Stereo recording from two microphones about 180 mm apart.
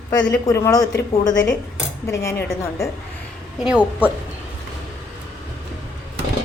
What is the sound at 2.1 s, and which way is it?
Speech, 15° left (ahead or behind).